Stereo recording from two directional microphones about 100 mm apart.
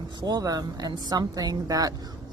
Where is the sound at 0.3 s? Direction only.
40° right (ahead or behind).